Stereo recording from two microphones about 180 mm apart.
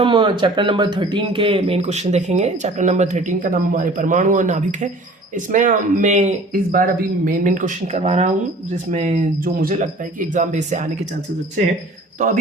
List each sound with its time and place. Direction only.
0.0 s speech: 25° right (ahead or behind); by 10.8 s 40° right (ahead or behind)